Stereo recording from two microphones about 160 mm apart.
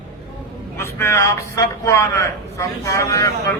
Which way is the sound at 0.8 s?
15° left (ahead or behind).